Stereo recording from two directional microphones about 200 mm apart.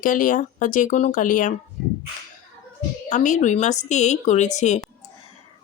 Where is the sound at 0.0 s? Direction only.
40° left (ahead or behind).